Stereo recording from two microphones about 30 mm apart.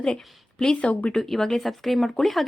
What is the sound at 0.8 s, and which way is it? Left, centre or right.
Speech, left.